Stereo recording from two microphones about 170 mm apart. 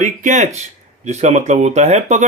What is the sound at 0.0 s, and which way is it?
Speech, 45° right (ahead or behind).